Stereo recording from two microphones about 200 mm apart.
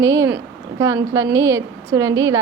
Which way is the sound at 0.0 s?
15° right (ahead or behind).